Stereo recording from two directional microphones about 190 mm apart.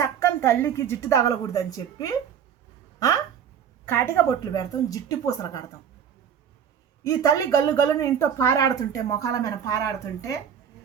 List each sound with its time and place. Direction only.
0.0 s a woman's voice: 15° left (ahead or behind)
3.9 s a woman's voice: 15° left (ahead or behind)
7.0 s a woman's voice: 15° left (ahead or behind)